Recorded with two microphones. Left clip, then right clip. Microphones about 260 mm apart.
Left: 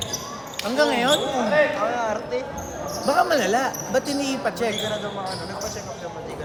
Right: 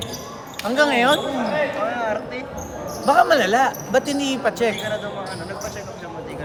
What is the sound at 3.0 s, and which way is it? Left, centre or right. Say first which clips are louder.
Speech: right 4 dB; right.